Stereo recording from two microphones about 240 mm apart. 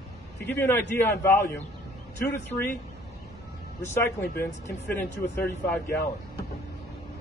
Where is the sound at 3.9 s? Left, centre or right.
Centre.